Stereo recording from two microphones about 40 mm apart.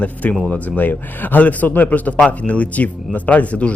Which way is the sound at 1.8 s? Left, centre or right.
Left.